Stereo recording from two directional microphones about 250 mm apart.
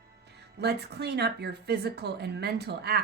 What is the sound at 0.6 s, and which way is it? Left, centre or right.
Speech, right.